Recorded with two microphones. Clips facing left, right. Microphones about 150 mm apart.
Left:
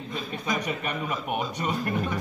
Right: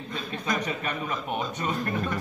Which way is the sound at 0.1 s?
5° left (ahead or behind).